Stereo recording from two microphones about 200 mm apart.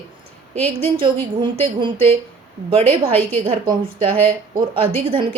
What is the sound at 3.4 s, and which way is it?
Speech, 25° right (ahead or behind).